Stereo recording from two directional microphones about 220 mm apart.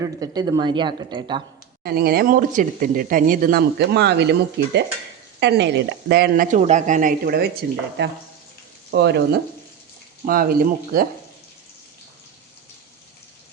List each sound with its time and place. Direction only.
0.0 s speech: 15° right (ahead or behind)
1.8 s speech: 45° right (ahead or behind)